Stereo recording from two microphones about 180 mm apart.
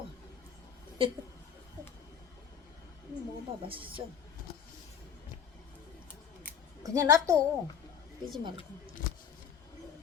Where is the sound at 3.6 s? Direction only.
30° right (ahead or behind).